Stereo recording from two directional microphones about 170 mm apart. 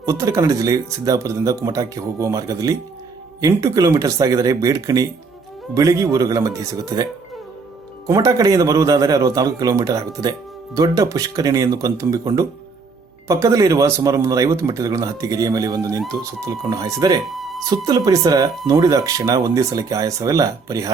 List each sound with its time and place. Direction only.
0.0 s speech: 20° right (ahead or behind)
17.2 s music: centre (ahead or behind)
17.7 s speech: 25° right (ahead or behind)